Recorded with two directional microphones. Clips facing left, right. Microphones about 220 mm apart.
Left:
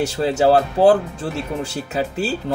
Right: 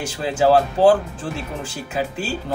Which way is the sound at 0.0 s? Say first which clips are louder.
Left 3 dB; 40° left (ahead or behind).